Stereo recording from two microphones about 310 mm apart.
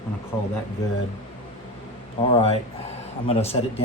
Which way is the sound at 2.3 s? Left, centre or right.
Centre.